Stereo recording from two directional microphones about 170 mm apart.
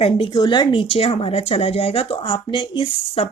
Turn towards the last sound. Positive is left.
turn(degrees=30)  # may be behind; listen again after turning